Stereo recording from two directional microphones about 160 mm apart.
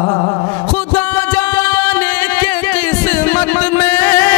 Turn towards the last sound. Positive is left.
turn(degrees=20)  # may be behind; listen again after turning